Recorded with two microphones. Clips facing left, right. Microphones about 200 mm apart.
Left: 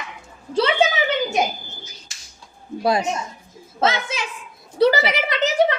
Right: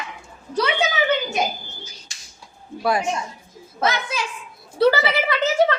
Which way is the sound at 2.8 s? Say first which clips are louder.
Left 2 dB; 20° left (ahead or behind).